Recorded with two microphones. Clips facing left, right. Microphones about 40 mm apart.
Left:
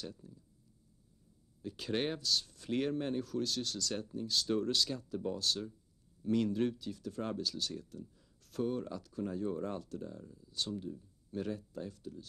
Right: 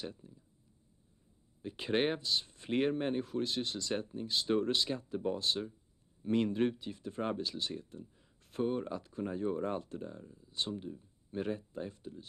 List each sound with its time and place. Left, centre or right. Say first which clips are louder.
0.0 s speech: right 2 dB; right
1.6 s speech: right 4 dB; right